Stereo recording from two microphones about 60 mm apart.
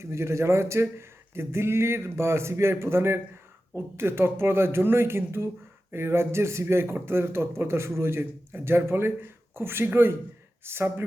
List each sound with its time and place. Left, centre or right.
0.0 s speech: right